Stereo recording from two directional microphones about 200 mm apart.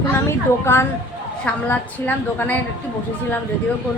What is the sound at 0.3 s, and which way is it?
A woman's voice, 10° left (ahead or behind).